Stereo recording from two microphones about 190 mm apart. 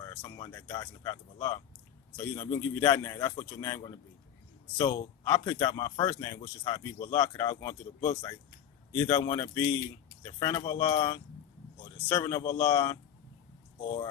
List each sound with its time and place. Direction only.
0.0 s speech: 20° left (ahead or behind)
2.6 s a man's voice: 15° left (ahead or behind)